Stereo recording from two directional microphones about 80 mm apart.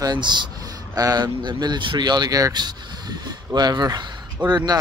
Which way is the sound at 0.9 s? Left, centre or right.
Right.